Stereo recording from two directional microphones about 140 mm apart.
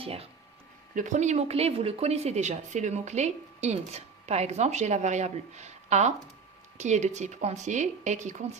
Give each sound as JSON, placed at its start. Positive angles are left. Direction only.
{"t": 0.0, "sound": "speech", "side_deg": -45}
{"t": 0.9, "sound": "speech", "side_deg": -60}